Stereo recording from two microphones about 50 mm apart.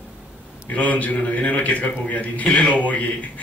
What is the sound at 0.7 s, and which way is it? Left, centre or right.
A man's voice, left.